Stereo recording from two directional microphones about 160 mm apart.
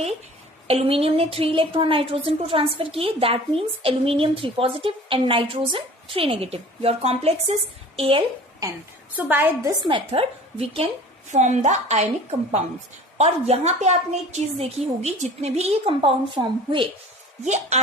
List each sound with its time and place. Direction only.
0.7 s a woman's voice: 40° right (ahead or behind)
9.1 s a woman's voice: 10° right (ahead or behind)
9.8 s a woman's voice: 35° right (ahead or behind)
17.4 s a woman's voice: 45° right (ahead or behind)